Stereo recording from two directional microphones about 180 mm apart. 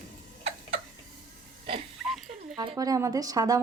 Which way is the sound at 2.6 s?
20° right (ahead or behind).